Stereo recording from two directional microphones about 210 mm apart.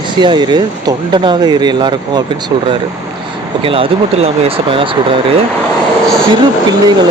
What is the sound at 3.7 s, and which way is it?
Speech, 25° right (ahead or behind).